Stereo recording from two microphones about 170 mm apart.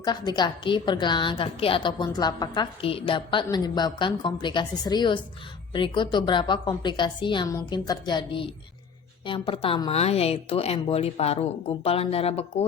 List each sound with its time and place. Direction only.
0.0 s a woman's voice: 25° left (ahead or behind)